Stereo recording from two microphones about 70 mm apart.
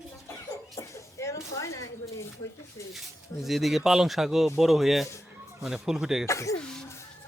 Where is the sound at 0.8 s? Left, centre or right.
Left.